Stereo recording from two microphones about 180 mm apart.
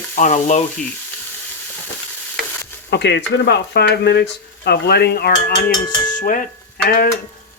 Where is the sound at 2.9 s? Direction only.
70° left (ahead or behind).